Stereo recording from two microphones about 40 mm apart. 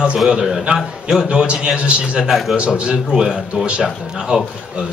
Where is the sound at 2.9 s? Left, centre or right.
Centre.